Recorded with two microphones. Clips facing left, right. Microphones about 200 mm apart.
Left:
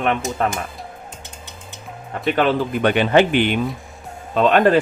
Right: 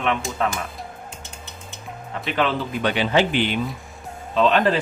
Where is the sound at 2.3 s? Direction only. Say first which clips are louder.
Left 5 dB; 50° left (ahead or behind).